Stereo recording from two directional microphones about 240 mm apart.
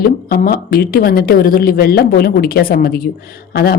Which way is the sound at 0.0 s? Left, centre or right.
Left.